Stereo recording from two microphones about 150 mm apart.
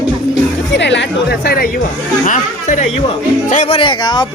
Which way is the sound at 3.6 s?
35° left (ahead or behind).